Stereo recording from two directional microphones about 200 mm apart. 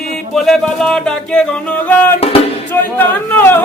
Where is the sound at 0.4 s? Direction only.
5° left (ahead or behind).